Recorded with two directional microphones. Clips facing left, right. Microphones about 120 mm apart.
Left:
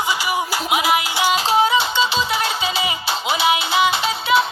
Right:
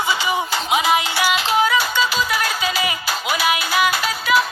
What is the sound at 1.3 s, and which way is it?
Music, 30° left (ahead or behind).